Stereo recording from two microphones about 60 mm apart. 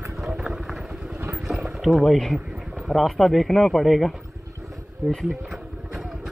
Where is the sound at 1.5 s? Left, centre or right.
Centre.